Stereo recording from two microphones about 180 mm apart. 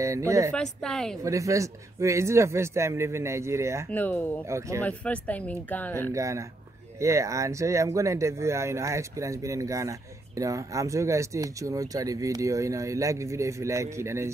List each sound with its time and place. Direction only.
0.0 s speech: 15° right (ahead or behind)
0.6 s a woman's voice: 5° left (ahead or behind)
1.2 s speech: 15° right (ahead or behind)
3.9 s speech: 10° left (ahead or behind)
4.5 s speech: 15° right (ahead or behind)
4.8 s speech: 5° left (ahead or behind)
6.1 s speech: 15° right (ahead or behind)